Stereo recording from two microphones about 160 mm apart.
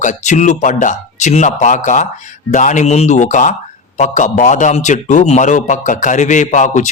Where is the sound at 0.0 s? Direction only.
50° left (ahead or behind).